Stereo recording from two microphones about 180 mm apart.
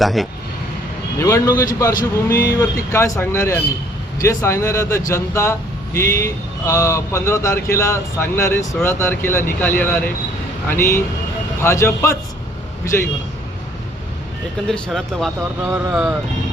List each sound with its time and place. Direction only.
0.0 s speech: centre (ahead or behind)
1.2 s speech: 15° left (ahead or behind)
14.7 s speech: centre (ahead or behind)
15.4 s speech: 10° right (ahead or behind)